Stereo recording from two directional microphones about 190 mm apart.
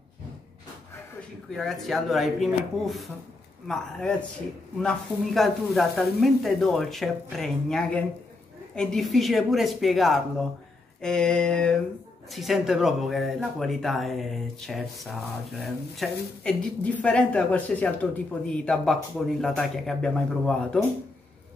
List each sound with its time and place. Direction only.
1.5 s speech: centre (ahead or behind)